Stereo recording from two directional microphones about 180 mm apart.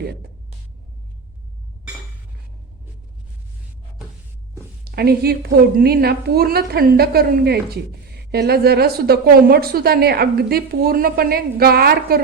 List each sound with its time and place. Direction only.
0.0 s speech: 65° right (ahead or behind)
4.9 s a woman's voice: 60° right (ahead or behind)